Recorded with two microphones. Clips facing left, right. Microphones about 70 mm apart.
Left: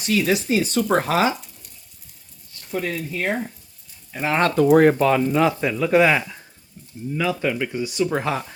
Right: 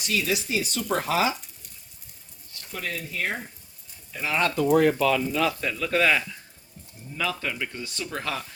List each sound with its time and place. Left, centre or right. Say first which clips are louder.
0.0 s speech: left 6 dB; left
3.1 s frying: left 6 dB; left
4.1 s speech: left 5 dB; left